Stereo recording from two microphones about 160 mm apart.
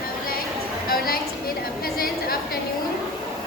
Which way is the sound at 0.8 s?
65° left (ahead or behind).